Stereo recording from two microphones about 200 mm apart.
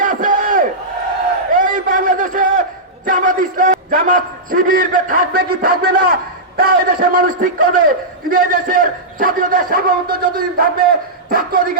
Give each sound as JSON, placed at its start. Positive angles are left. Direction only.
{"t": 0.0, "sound": "crowd", "side_deg": -40}
{"t": 1.5, "sound": "a sound", "side_deg": -40}
{"t": 3.1, "sound": "a man's voice", "side_deg": -40}